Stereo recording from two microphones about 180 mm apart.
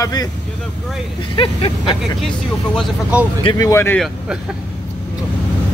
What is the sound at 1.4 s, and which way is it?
Speech, 30° left (ahead or behind).